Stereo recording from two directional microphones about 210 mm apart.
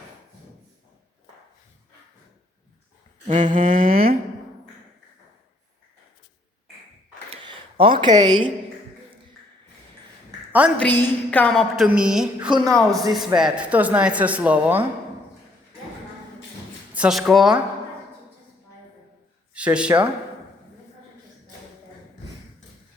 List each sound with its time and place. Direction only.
3.5 s a sound: 40° right (ahead or behind)
7.4 s speech: 25° right (ahead or behind)
10.8 s a woman's voice: 10° left (ahead or behind); by 14.8 s 5° right (ahead or behind)
16.9 s speech: 5° right (ahead or behind)
19.5 s speech: 5° right (ahead or behind)